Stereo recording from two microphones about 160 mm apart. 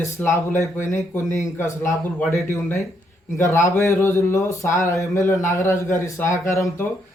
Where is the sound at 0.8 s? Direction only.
50° left (ahead or behind).